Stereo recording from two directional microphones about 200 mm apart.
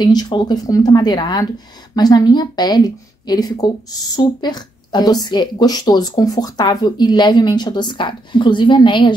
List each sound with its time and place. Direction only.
0.0 s a woman's voice: 20° left (ahead or behind)